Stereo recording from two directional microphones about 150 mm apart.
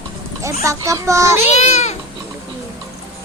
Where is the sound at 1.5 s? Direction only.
50° left (ahead or behind).